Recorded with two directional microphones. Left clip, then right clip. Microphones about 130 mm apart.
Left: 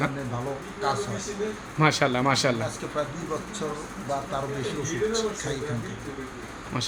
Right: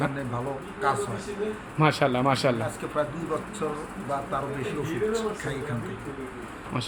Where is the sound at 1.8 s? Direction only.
Centre (ahead or behind).